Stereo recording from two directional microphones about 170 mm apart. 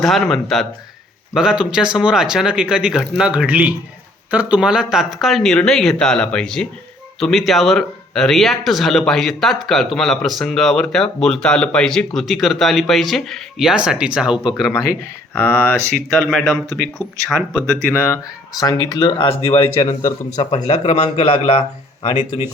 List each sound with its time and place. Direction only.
0.0 s speech: centre (ahead or behind)
14.6 s speech: 20° left (ahead or behind); by 21.6 s 40° left (ahead or behind)